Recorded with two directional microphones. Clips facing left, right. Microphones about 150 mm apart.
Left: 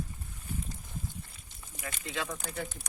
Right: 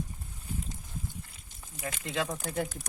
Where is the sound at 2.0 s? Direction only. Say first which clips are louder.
Right 4 dB; 40° right (ahead or behind).